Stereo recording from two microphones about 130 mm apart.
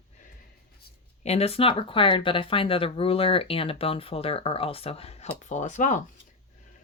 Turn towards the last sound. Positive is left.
turn(degrees=70)  # may be behind; listen again after turning